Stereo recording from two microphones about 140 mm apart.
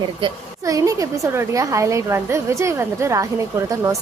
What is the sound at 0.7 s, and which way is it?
A woman's voice, 25° right (ahead or behind).